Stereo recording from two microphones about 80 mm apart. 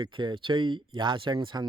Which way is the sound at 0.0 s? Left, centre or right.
Right.